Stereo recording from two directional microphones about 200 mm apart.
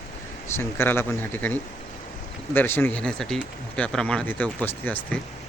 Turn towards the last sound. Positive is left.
turn(degrees=10)  # may be behind; listen again after turning